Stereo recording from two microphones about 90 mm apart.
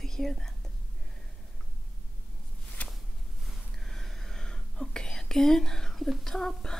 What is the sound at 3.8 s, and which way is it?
Whispering, 5° left (ahead or behind).